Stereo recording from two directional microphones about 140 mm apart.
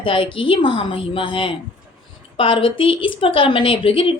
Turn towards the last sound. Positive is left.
turn(degrees=40)  # may be behind; listen again after turning